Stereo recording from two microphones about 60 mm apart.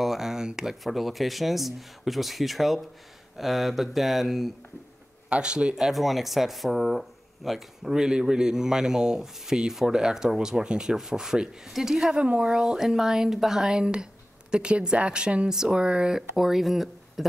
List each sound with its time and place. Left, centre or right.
0.0 s speech: centre
5.3 s speech: centre
5.8 s speech: centre